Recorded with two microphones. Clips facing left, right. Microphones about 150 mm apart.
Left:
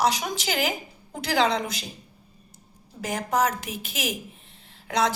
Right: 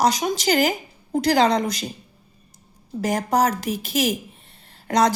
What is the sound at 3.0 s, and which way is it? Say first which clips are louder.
A woman's voice: right 4 dB; 40° right (ahead or behind).